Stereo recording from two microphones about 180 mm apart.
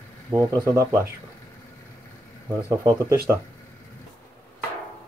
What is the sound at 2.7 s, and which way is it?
Speech, 15° right (ahead or behind).